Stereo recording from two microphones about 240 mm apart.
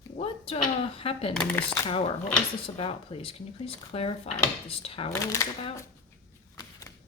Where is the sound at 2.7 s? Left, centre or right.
Left.